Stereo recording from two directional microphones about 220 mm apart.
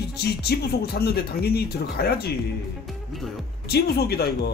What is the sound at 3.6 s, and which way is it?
Speech, 45° left (ahead or behind).